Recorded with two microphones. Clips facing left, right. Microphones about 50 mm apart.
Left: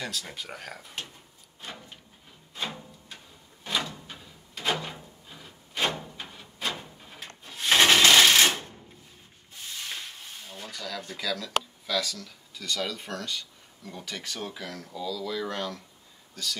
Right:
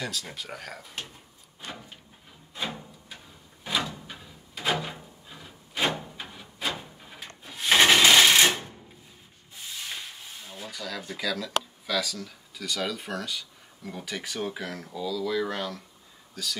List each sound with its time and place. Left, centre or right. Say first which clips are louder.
0.0 s speech: right 1 dB; centre
2.5 s a sound: right 1 dB; centre
3.6 s drawer open or close: right 1 dB; centre
9.5 s speech: even; centre